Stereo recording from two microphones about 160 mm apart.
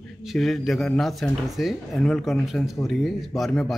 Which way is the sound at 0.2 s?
Centre (ahead or behind).